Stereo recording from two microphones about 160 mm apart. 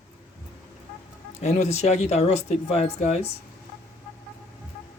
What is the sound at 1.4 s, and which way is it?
Speech, 45° left (ahead or behind).